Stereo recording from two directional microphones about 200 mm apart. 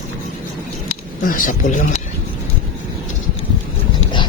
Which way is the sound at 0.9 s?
40° left (ahead or behind).